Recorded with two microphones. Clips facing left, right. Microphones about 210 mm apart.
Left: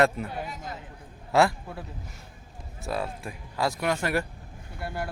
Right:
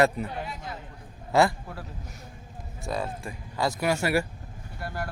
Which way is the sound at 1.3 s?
Centre (ahead or behind).